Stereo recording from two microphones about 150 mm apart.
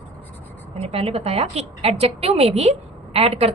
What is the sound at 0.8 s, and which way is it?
A woman's voice, 45° right (ahead or behind).